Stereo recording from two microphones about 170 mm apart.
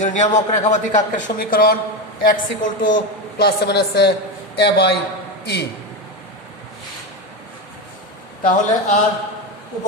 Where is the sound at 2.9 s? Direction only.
70° left (ahead or behind).